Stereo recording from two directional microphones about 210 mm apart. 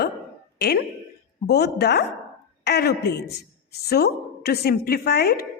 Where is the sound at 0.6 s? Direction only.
50° left (ahead or behind).